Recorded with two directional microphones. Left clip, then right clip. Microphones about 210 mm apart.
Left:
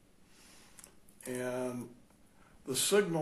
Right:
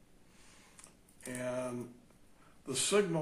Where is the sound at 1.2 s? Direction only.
30° left (ahead or behind).